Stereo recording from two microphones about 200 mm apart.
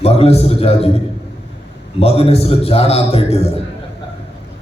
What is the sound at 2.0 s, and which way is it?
A man's voice, 30° left (ahead or behind).